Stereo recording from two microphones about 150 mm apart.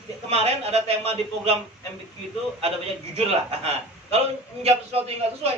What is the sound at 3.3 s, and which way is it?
A man's voice, 45° right (ahead or behind).